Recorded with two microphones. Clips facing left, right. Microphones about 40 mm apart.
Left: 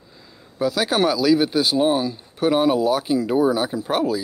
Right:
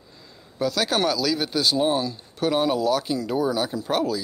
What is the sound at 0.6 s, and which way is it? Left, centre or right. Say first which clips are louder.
Speech: left 3 dB; centre.